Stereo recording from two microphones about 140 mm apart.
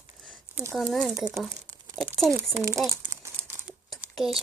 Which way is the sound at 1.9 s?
5° left (ahead or behind).